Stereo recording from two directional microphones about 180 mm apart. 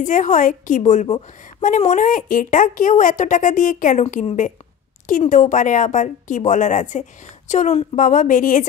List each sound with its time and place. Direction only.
0.0 s speech: 45° left (ahead or behind)